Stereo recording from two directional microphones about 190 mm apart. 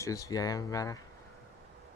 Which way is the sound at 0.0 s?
15° left (ahead or behind).